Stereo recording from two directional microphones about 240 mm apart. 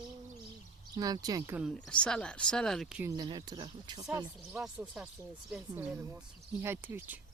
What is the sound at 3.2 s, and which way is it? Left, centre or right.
Speech, centre.